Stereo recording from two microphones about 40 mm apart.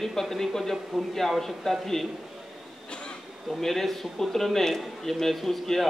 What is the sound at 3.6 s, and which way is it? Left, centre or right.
A man's voice, centre.